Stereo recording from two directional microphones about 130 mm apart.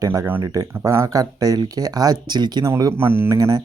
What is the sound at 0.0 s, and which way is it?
Speech, 25° right (ahead or behind).